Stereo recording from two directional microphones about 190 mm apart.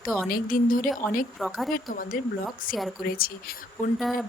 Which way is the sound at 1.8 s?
45° left (ahead or behind).